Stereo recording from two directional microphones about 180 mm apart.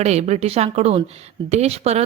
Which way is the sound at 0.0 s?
40° right (ahead or behind).